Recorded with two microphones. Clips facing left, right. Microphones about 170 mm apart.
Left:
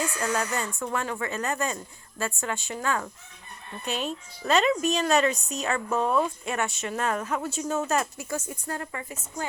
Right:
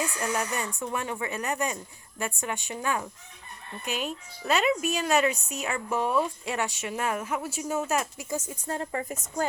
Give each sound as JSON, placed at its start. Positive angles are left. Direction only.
{"t": 0.0, "sound": "speech", "side_deg": -15}